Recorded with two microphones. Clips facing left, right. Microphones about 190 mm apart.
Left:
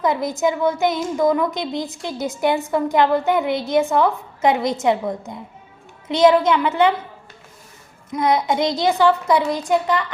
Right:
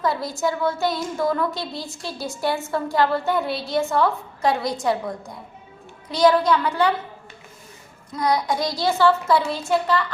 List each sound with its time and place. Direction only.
0.0 s a woman's voice: 20° left (ahead or behind)
8.1 s a woman's voice: 25° left (ahead or behind)